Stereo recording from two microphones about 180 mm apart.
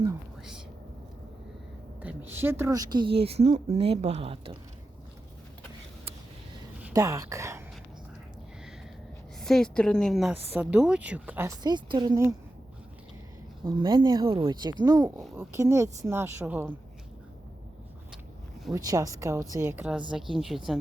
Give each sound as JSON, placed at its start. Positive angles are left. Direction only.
{"t": 2.0, "sound": "a woman's voice", "side_deg": -10}
{"t": 3.2, "sound": "a woman's voice", "side_deg": -35}
{"t": 6.8, "sound": "speech", "side_deg": -15}
{"t": 9.4, "sound": "a woman's voice", "side_deg": 5}
{"t": 13.7, "sound": "speech", "side_deg": -25}
{"t": 18.7, "sound": "a woman's voice", "side_deg": -20}